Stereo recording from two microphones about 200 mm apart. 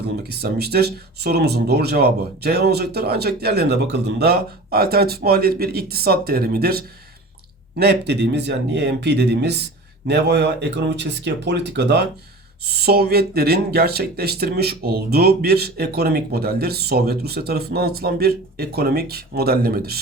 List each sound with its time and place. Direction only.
0.2 s speech: 50° right (ahead or behind)